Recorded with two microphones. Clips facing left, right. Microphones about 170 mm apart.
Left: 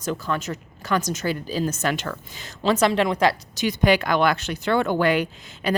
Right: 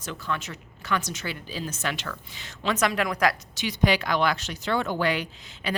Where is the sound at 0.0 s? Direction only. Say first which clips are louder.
Left 6 dB; 40° left (ahead or behind).